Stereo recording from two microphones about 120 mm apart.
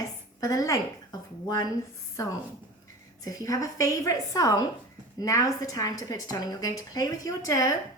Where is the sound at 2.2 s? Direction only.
25° left (ahead or behind).